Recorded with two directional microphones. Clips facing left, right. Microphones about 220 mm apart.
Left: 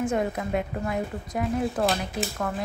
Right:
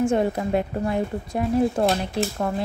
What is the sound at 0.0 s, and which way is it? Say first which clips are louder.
A woman's voice: right 5 dB; 30° right (ahead or behind).